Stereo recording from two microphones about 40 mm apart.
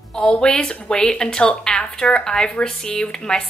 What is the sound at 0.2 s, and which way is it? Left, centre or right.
A woman's voice, left.